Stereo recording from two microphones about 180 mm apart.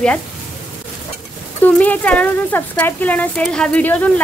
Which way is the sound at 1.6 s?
10° left (ahead or behind).